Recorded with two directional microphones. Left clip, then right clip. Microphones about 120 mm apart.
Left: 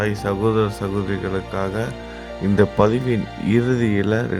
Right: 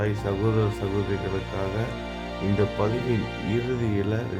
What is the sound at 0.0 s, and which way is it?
Speech, 45° left (ahead or behind).